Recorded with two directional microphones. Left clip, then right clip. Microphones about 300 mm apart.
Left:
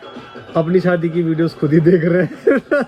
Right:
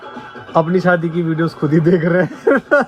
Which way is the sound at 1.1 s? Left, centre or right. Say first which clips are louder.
Left 1 dB; centre.